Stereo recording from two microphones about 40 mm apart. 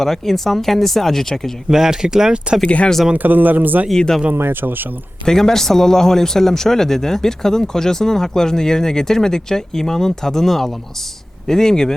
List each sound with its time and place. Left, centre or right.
0.0 s speech: centre
1.7 s speech: centre
2.6 s speech: left
3.2 s speech: right
3.9 s speech: centre
4.6 s speech: right
5.2 s speech: centre